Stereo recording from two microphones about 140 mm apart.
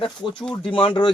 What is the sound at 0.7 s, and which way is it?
Speech, 35° left (ahead or behind).